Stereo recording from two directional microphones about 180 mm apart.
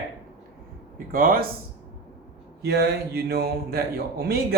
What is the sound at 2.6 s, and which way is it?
Speech, 65° right (ahead or behind).